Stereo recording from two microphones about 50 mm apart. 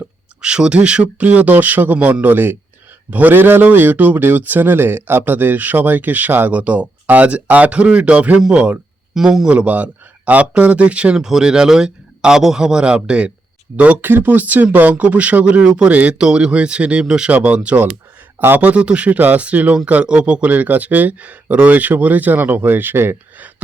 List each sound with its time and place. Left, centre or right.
0.4 s speech: centre
9.1 s speech: centre
9.5 s speech: right
11.2 s speech: centre
14.0 s speech: right
16.1 s speech: centre
18.4 s speech: right
18.7 s speech: right